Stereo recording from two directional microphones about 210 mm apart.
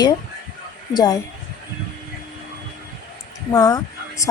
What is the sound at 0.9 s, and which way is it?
Speech, 20° left (ahead or behind).